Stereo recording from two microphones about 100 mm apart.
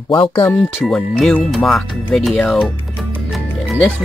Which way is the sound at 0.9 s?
5° left (ahead or behind).